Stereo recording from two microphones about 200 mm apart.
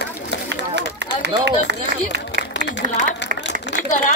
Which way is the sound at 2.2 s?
60° left (ahead or behind).